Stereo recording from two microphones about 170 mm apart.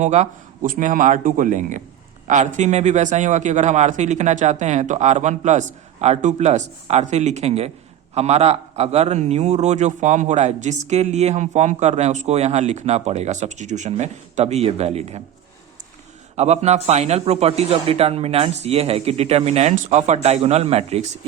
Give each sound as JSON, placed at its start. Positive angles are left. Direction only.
{"t": 0.0, "sound": "a man's voice", "side_deg": -45}
{"t": 16.3, "sound": "a man's voice", "side_deg": -40}